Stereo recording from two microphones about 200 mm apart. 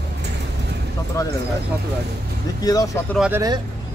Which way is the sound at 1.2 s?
15° left (ahead or behind).